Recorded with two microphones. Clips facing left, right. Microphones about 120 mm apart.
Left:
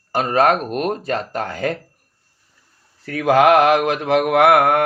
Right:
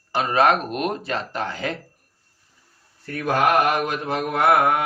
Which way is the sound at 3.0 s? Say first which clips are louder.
Left 7 dB; 90° left.